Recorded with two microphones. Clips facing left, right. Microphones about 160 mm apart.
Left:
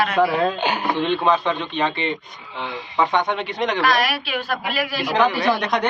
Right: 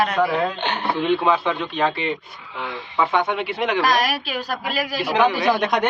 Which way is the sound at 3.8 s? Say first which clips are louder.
Even; 40° right (ahead or behind).